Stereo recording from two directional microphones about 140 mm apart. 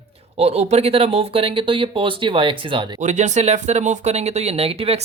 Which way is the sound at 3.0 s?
55° right (ahead or behind).